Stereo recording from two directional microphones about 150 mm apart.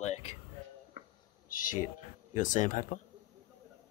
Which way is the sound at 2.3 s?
55° left (ahead or behind).